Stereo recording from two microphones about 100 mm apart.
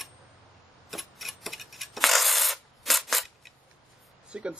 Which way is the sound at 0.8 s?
Centre (ahead or behind).